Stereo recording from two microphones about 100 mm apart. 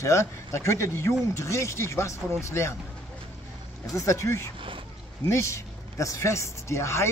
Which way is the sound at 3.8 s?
35° left (ahead or behind).